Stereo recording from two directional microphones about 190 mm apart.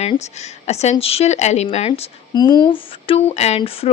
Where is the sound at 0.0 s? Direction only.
35° left (ahead or behind).